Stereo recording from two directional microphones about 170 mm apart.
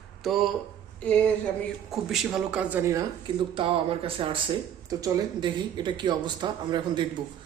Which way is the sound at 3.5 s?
30° right (ahead or behind).